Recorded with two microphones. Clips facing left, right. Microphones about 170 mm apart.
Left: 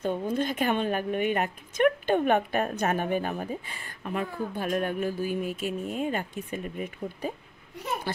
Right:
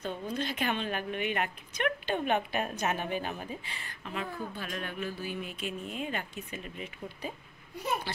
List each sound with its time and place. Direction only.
0.0 s a woman's voice: 50° left (ahead or behind)